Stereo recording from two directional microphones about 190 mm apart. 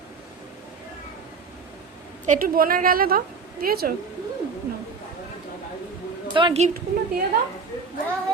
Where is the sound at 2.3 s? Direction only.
50° right (ahead or behind).